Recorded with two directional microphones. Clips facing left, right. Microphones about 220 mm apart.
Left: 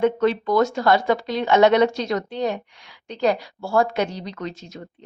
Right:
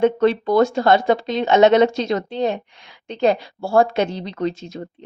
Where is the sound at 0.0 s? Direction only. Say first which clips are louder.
Right 3 dB; 30° right (ahead or behind).